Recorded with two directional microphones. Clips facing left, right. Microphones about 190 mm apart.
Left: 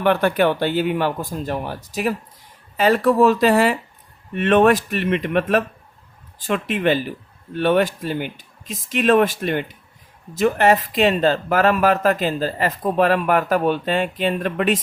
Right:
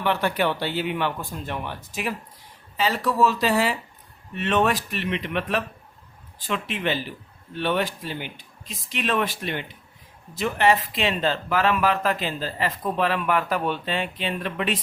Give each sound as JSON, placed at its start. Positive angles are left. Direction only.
{"t": 0.0, "sound": "speech", "side_deg": 50}
{"t": 2.7, "sound": "speech", "side_deg": 55}